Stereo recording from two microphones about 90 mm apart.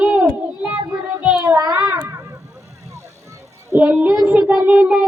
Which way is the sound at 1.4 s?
40° right (ahead or behind).